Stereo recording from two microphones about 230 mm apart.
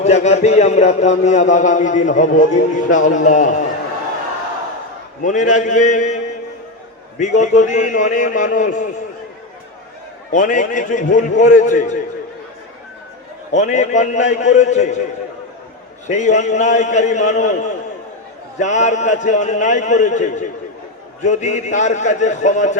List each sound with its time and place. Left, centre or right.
0.0 s a man's voice: left
5.2 s a man's voice: left
7.2 s a man's voice: left
10.3 s a man's voice: left
13.5 s a man's voice: left
16.0 s a man's voice: left